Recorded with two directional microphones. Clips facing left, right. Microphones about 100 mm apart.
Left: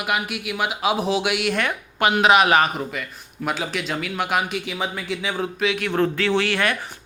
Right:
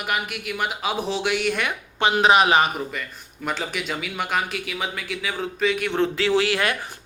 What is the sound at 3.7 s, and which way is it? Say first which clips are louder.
Speech: left 2 dB; 5° right (ahead or behind).